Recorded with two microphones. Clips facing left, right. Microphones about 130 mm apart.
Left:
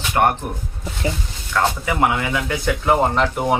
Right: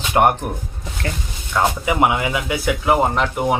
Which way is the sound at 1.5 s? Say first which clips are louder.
Right 2 dB; 15° right (ahead or behind).